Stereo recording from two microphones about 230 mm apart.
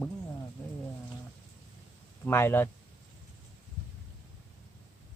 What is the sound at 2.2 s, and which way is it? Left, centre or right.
Speech, centre.